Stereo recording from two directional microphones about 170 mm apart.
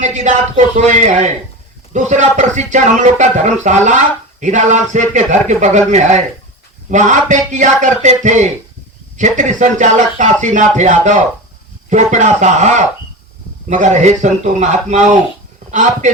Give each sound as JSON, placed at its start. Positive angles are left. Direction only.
{"t": 0.0, "sound": "speech", "side_deg": -45}